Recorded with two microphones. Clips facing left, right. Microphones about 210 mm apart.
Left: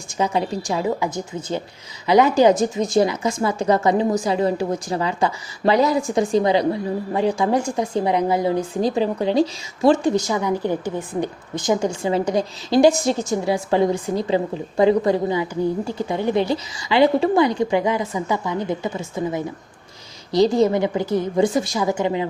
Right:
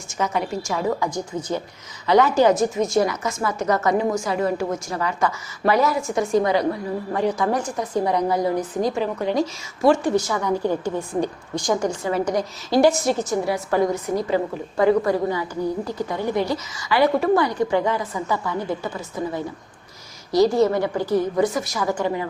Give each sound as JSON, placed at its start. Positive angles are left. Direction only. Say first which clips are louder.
{"t": 0.1, "sound": "a woman's voice", "louder": "left 3 dB", "side_deg": 30}
{"t": 0.9, "sound": "a woman's voice", "louder": "even", "side_deg": 5}
{"t": 2.9, "sound": "a woman's voice", "louder": "left 3 dB", "side_deg": 30}
{"t": 6.1, "sound": "a woman's voice", "louder": "left 1 dB", "side_deg": 30}
{"t": 10.0, "sound": "a woman's voice", "louder": "left 2 dB", "side_deg": 20}